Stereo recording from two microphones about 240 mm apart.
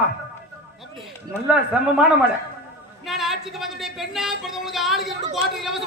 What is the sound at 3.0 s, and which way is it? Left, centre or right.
A man's voice, centre.